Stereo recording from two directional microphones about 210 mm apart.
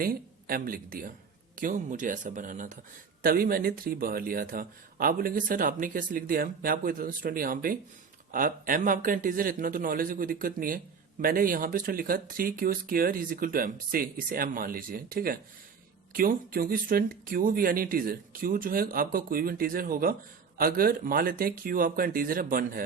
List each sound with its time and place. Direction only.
0.0 s speech: 45° right (ahead or behind)